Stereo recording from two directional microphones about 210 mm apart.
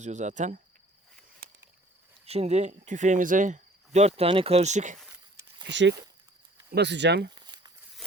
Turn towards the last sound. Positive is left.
turn(degrees=-55)  # may be behind; listen again after turning